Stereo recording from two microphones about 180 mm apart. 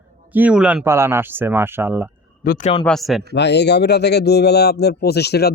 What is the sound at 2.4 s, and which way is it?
Speech, 55° left (ahead or behind).